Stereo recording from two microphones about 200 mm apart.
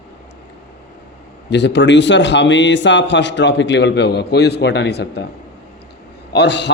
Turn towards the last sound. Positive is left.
turn(degrees=60)  # may be behind; listen again after turning